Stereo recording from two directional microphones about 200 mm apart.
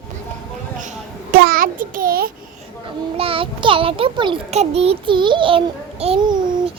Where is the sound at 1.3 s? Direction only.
45° right (ahead or behind).